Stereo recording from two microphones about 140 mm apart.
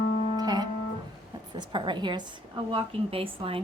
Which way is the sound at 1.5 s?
35° right (ahead or behind).